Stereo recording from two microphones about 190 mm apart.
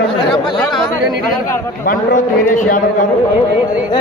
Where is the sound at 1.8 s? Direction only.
45° left (ahead or behind).